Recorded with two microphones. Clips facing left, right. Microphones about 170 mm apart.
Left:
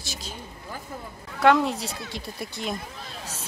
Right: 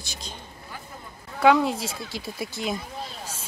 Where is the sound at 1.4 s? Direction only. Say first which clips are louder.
Right 1 dB; centre (ahead or behind).